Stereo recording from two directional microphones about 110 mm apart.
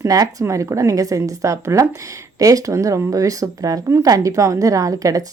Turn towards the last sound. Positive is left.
turn(degrees=-30)  # may be behind; listen again after turning